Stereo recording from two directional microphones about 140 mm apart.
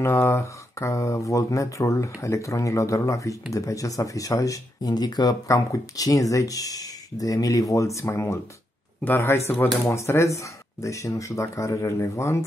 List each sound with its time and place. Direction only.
0.0 s speech: 15° left (ahead or behind)